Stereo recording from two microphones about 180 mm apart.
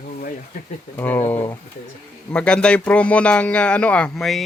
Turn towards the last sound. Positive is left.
turn(degrees=0)  # may be behind; listen again after turning